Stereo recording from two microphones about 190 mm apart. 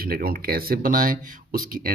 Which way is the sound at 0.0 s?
50° right (ahead or behind).